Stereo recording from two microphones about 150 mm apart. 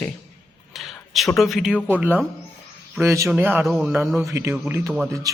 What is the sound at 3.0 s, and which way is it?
Speech, 20° right (ahead or behind).